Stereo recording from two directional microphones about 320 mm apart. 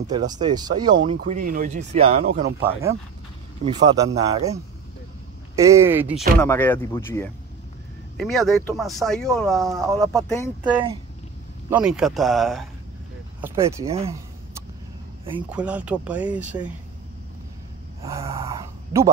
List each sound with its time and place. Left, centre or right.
0.0 s speech: centre
1.2 s speech: right
2.6 s speech: centre
5.6 s speech: centre
6.4 s speech: centre
9.7 s speech: centre
9.9 s speech: centre
11.7 s speech: centre
15.5 s speech: centre
18.0 s speech: centre